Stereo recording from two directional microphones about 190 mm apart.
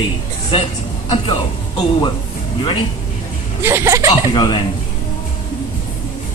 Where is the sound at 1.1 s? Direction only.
25° left (ahead or behind).